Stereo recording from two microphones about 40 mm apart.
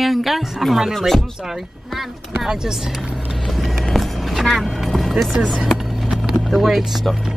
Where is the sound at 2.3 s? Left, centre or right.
Centre.